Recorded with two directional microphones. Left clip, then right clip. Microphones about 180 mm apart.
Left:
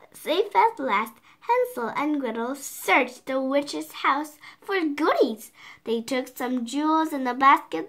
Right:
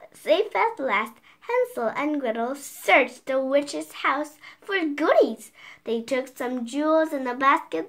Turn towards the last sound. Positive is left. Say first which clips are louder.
# left 2 dB
turn(degrees=40)  # may be behind; listen again after turning